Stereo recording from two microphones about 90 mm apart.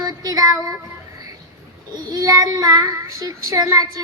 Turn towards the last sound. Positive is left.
turn(degrees=-45)  # may be behind; listen again after turning